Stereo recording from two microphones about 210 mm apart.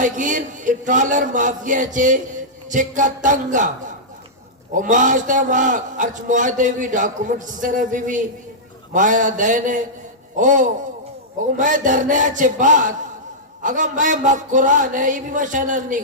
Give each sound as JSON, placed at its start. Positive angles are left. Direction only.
{"t": 0.0, "sound": "speech", "side_deg": -40}